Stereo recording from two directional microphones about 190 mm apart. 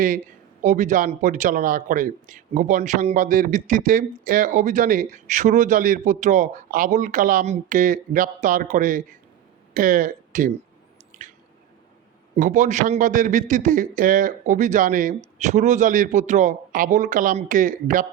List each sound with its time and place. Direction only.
0.6 s a man's voice: 40° right (ahead or behind)
12.4 s a man's voice: 40° right (ahead or behind)